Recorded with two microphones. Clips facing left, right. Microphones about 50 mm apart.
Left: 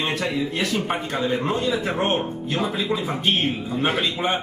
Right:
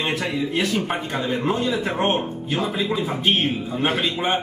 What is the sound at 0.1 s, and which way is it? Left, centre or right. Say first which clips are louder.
A man's voice: right 1 dB; centre.